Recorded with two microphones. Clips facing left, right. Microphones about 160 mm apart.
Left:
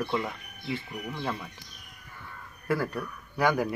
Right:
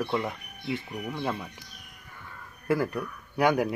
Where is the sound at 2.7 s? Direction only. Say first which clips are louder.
Right 2 dB; 20° right (ahead or behind).